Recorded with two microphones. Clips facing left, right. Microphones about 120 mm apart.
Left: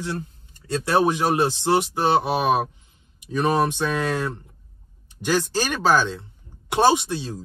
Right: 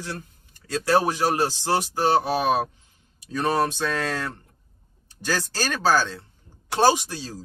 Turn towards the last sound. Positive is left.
turn(degrees=20)  # may be behind; listen again after turning